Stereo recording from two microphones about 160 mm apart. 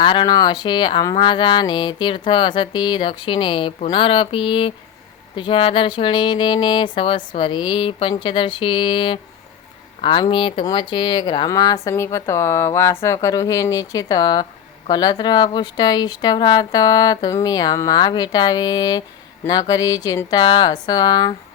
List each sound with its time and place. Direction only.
0.0 s speech: 30° left (ahead or behind)
5.4 s a sound: 35° left (ahead or behind)
10.0 s speech: 30° left (ahead or behind)